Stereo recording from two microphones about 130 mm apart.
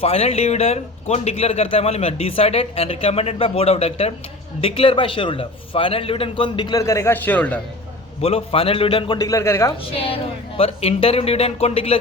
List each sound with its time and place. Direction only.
0.0 s a man's voice: 50° left (ahead or behind); by 7.6 s 10° left (ahead or behind)
8.2 s speech: 50° left (ahead or behind)
9.1 s a man's voice: 25° left (ahead or behind)
9.9 s speech: 45° left (ahead or behind)